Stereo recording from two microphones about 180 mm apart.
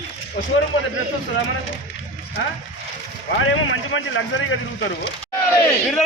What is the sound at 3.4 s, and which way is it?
A man's voice, 90° left.